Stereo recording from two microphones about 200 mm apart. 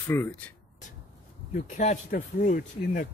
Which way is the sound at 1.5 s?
40° left (ahead or behind).